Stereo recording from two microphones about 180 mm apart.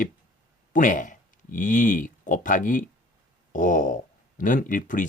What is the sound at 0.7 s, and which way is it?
Speech, 45° left (ahead or behind).